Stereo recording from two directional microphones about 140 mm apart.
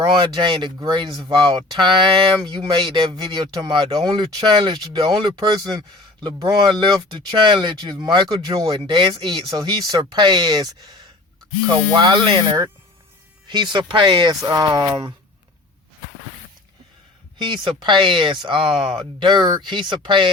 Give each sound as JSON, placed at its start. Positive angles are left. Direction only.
{"t": 0.2, "sound": "speech", "side_deg": -35}
{"t": 17.3, "sound": "speech", "side_deg": -35}